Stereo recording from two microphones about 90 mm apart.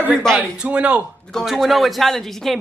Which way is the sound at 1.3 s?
5° left (ahead or behind).